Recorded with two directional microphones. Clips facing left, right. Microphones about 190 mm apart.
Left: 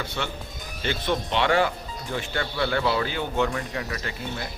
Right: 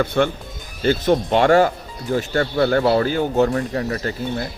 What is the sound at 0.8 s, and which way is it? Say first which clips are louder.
Speech: right 9 dB; 40° right (ahead or behind).